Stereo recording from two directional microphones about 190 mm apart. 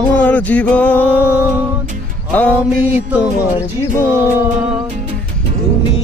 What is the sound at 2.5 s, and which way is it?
Music, 10° right (ahead or behind).